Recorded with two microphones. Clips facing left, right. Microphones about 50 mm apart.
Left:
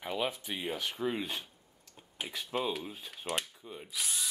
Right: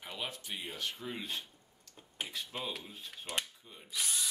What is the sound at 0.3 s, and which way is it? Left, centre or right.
Speech, centre.